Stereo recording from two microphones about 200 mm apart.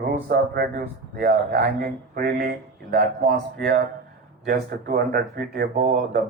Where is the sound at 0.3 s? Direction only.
50° right (ahead or behind).